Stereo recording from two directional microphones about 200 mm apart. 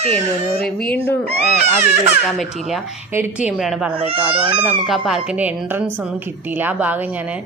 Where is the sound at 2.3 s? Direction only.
Centre (ahead or behind).